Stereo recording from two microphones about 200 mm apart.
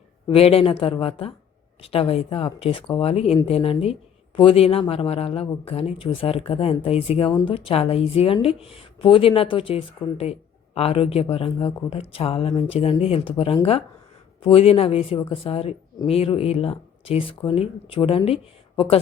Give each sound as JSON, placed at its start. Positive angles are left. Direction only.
{"t": 0.3, "sound": "speech", "side_deg": 30}